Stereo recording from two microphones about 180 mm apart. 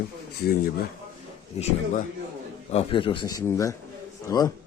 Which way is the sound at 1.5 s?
35° left (ahead or behind).